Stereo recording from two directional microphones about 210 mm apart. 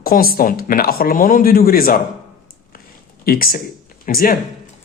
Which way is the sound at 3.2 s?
45° left (ahead or behind).